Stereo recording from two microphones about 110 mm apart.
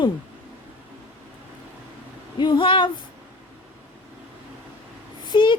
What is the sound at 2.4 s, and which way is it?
Speech, 45° left (ahead or behind).